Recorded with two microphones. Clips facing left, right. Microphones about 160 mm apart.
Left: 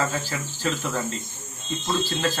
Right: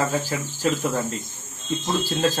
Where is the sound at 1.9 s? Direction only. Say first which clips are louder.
Right 2 dB; 10° right (ahead or behind).